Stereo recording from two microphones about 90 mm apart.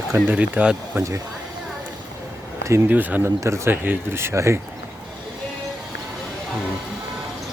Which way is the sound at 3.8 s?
20° right (ahead or behind).